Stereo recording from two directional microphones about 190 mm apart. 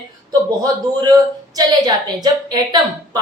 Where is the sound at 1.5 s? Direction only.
20° right (ahead or behind).